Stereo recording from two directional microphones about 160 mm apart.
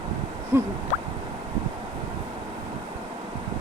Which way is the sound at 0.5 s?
15° right (ahead or behind).